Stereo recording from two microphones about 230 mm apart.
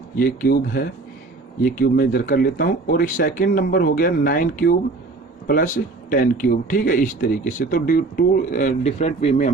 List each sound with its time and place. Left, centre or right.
0.2 s speech: left